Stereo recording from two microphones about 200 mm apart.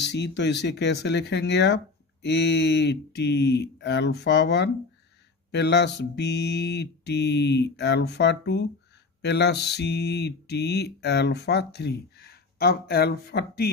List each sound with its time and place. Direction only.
0.0 s mantra: 60° left (ahead or behind)